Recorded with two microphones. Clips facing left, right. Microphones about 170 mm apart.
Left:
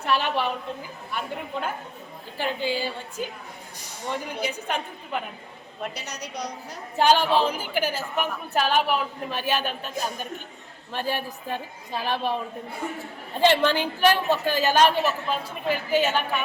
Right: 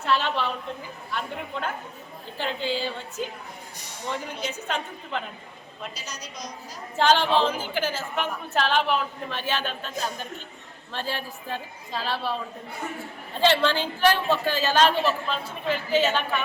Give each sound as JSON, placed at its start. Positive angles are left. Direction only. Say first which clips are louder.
{"t": 0.0, "sound": "a woman's voice", "louder": "left 1 dB", "side_deg": 15}
{"t": 2.4, "sound": "a woman's voice", "louder": "left 1 dB", "side_deg": 10}
{"t": 4.4, "sound": "a woman's voice", "louder": "even", "side_deg": 10}
{"t": 5.9, "sound": "a woman's voice", "louder": "left 4 dB", "side_deg": 65}
{"t": 6.9, "sound": "a woman's voice", "louder": "left 1 dB", "side_deg": 10}
{"t": 13.4, "sound": "a woman's voice", "louder": "left 2 dB", "side_deg": 15}